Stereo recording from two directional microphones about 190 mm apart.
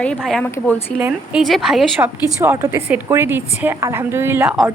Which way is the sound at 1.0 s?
5° right (ahead or behind).